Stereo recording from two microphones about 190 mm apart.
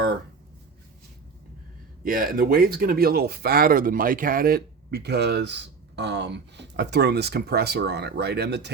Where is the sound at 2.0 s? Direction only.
50° right (ahead or behind).